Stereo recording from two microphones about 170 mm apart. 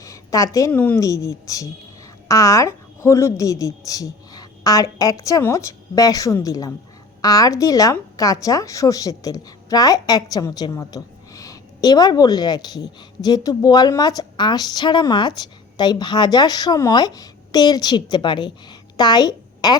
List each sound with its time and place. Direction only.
0.0 s a woman's voice: 20° left (ahead or behind)